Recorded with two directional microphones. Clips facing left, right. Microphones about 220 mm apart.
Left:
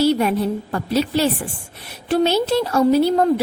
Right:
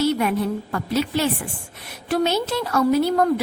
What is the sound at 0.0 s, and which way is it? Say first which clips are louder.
A woman's voice: left 3 dB; 30° left (ahead or behind).